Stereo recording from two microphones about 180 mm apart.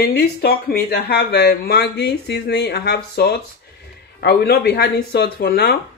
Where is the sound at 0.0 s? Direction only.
60° left (ahead or behind).